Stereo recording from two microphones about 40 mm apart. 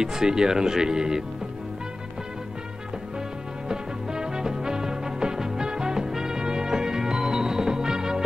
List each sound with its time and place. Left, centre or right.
0.0 s speech: centre
3.6 s music: centre